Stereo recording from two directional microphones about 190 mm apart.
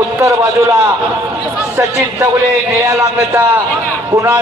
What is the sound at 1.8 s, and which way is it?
A man's voice, 15° right (ahead or behind).